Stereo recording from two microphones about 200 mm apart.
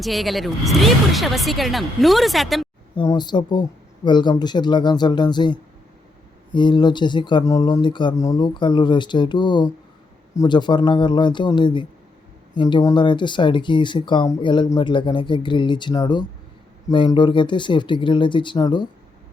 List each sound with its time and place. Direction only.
0.0 s speech: centre (ahead or behind)
2.9 s speech: 20° left (ahead or behind)